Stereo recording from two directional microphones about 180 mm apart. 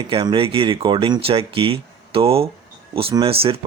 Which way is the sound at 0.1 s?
30° right (ahead or behind).